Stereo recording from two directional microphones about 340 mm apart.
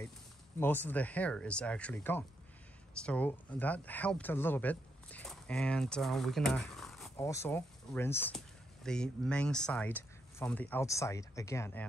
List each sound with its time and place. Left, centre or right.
0.6 s speech: centre